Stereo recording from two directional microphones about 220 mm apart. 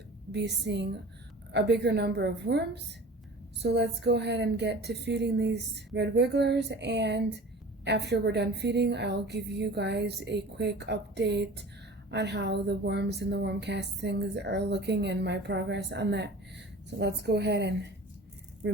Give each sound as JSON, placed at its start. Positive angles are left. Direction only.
{"t": 0.3, "sound": "speech", "side_deg": -50}